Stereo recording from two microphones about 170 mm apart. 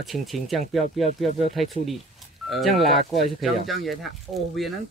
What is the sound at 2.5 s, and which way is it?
Speech, centre (ahead or behind).